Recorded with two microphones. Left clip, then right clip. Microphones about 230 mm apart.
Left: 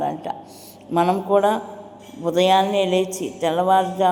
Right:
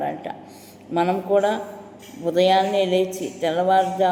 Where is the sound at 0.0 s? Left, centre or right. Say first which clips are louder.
Left 2 dB; centre.